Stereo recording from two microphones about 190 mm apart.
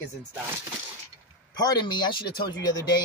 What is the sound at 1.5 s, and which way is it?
Speech, 20° left (ahead or behind).